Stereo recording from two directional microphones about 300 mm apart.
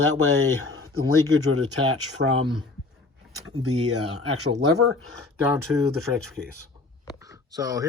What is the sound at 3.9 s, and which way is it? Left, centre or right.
Speech, right.